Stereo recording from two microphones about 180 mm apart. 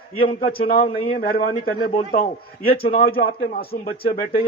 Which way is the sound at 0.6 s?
50° left (ahead or behind).